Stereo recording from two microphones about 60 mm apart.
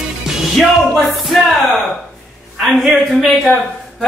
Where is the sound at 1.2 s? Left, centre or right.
Centre.